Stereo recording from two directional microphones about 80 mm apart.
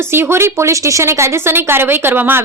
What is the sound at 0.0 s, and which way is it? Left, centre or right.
A woman's voice, right.